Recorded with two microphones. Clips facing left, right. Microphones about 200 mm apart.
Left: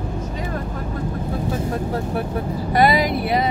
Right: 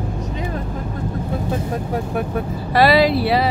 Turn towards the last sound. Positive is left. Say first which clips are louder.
# right 3 dB
turn(degrees=-80)